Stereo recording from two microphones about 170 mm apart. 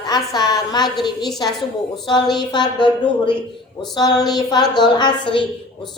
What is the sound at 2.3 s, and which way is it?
Speech, 25° left (ahead or behind).